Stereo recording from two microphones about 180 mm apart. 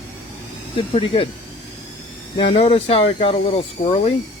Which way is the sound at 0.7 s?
30° left (ahead or behind).